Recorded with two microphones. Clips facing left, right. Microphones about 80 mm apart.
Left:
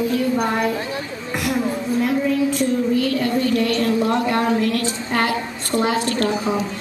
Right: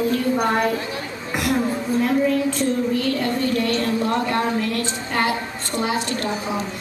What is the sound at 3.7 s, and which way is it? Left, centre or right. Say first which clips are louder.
Speech: left 2 dB; right.